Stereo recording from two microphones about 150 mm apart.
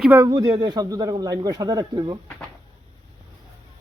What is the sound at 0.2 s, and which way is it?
Speech, 25° right (ahead or behind).